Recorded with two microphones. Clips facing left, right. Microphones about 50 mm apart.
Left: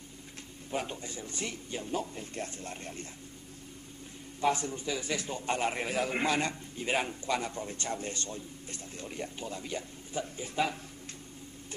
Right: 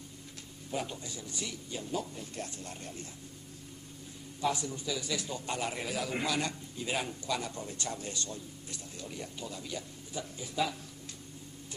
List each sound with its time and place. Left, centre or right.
0.7 s a man's voice: left
4.4 s a man's voice: left